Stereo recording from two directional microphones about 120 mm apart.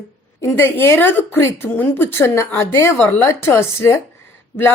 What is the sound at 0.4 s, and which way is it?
Speech, 20° left (ahead or behind).